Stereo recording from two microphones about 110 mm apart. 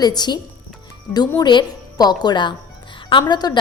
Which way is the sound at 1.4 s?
40° left (ahead or behind).